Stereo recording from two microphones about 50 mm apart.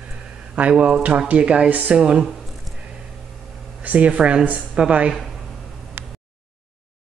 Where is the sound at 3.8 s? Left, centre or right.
Right.